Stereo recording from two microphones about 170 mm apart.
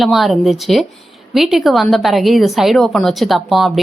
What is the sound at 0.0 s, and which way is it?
A woman's voice, centre (ahead or behind).